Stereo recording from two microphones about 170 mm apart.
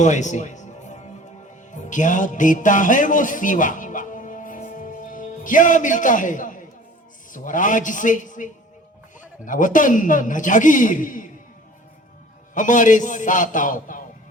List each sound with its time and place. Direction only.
0.0 s music: 45° left (ahead or behind)
7.3 s a man's voice: 50° left (ahead or behind)
12.5 s a man's voice: 50° left (ahead or behind)